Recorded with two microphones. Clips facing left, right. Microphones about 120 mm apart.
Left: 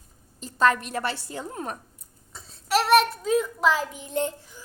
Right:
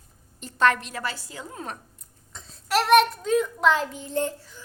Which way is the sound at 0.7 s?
30° left (ahead or behind).